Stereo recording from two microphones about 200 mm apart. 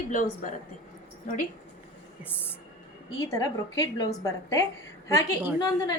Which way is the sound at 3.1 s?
15° left (ahead or behind).